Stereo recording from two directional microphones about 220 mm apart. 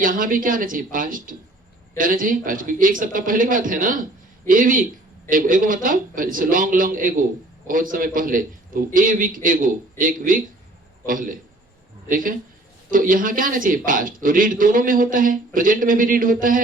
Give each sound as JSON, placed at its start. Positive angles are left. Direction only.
{"t": 0.0, "sound": "a man's voice", "side_deg": -40}